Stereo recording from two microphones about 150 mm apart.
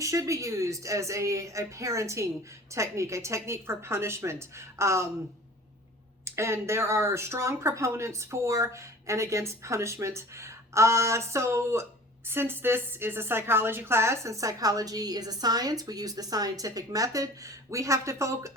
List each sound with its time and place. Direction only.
0.0 s speech: 20° right (ahead or behind)
6.2 s speech: 15° right (ahead or behind)